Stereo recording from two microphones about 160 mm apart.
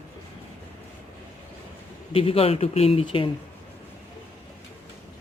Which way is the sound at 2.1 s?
35° left (ahead or behind).